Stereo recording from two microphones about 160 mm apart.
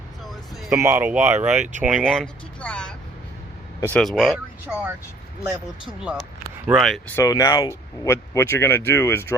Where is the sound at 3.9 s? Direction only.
Centre (ahead or behind).